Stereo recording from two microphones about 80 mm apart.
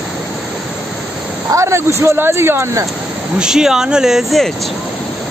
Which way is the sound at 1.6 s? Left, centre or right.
Right.